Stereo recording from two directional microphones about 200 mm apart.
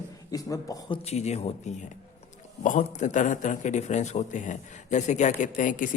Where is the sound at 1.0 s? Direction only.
35° left (ahead or behind).